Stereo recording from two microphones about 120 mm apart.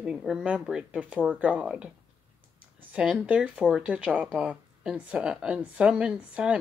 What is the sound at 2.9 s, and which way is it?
Speech, 10° right (ahead or behind).